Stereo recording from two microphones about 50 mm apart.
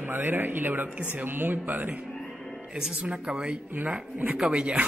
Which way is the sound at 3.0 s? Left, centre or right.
Right.